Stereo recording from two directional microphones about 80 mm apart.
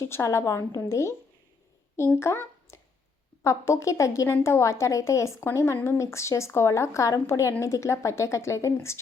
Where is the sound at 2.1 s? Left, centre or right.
Left.